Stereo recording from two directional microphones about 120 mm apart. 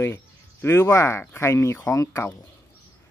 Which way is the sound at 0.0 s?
20° left (ahead or behind).